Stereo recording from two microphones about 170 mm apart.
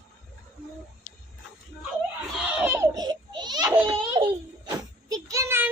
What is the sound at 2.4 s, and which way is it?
Baby laughter, 10° right (ahead or behind).